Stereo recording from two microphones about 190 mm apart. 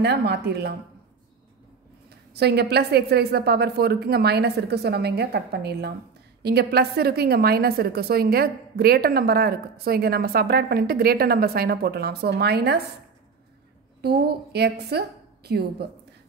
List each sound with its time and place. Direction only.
0.0 s a woman's voice: 60° right (ahead or behind)
2.0 s a woman's voice: 60° right (ahead or behind)
14.0 s a woman's voice: 60° right (ahead or behind)